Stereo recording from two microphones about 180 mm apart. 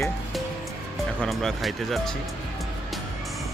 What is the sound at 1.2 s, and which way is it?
Speech, centre (ahead or behind).